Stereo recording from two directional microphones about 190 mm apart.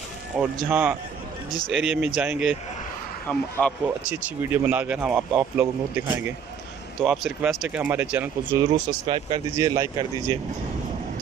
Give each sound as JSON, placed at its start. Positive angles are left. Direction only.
{"t": 0.4, "sound": "speech", "side_deg": -5}
{"t": 3.3, "sound": "speech", "side_deg": 5}
{"t": 4.1, "sound": "speech", "side_deg": -10}
{"t": 9.0, "sound": "speech", "side_deg": -25}